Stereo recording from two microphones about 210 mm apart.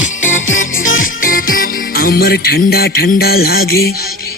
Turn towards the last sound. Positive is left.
turn(degrees=45)  # may be behind; listen again after turning